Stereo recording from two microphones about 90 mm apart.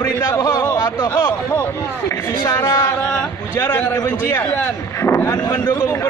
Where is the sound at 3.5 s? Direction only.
30° left (ahead or behind).